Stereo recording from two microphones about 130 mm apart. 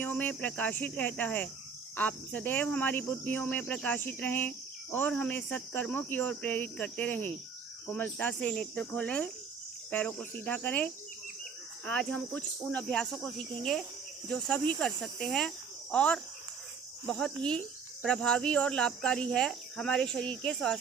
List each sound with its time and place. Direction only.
0.0 s speech: 10° left (ahead or behind)